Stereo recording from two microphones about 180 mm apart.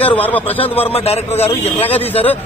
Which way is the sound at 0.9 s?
35° left (ahead or behind).